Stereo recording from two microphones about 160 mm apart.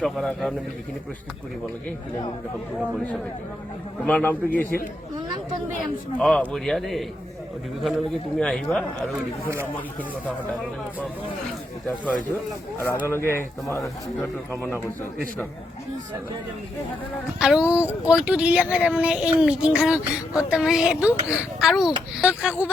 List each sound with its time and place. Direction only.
0.0 s a man's voice: centre (ahead or behind)
4.0 s speech: 10° left (ahead or behind)
6.1 s a man's voice: 5° left (ahead or behind)
13.1 s speech: 15° left (ahead or behind)
17.4 s a man's voice: 5° right (ahead or behind)